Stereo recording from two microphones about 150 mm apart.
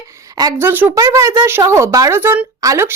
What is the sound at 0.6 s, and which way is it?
A woman's voice, 15° right (ahead or behind).